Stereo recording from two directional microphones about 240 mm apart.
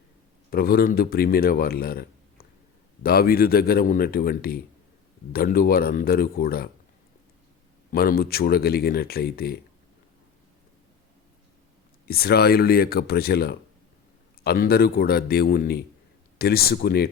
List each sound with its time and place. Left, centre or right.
0.5 s speech: left
7.9 s speech: left
12.0 s speech: left